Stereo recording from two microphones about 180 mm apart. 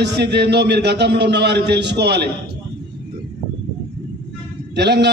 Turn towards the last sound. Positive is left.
turn(degrees=-70)  # may be behind; listen again after turning